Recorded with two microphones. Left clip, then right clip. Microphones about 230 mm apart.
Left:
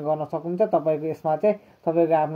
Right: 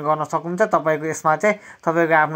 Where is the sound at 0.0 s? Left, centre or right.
Right.